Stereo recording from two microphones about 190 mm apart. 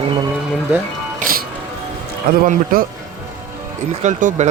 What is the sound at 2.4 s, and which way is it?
Speech, 50° right (ahead or behind).